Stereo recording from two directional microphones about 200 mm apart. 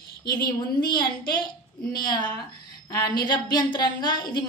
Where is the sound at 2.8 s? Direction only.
15° left (ahead or behind).